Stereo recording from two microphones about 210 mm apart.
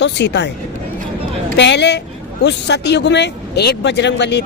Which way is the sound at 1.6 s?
55° left (ahead or behind).